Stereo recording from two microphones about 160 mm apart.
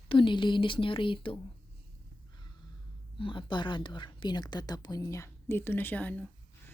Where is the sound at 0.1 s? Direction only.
30° left (ahead or behind).